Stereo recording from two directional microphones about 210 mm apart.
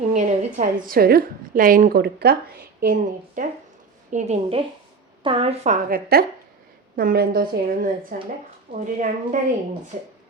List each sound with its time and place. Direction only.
0.2 s a woman's voice: 35° right (ahead or behind)